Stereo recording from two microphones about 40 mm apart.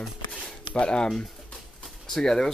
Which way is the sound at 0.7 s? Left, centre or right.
Left.